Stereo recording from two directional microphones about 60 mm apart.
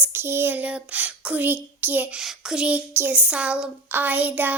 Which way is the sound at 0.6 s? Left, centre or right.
Right.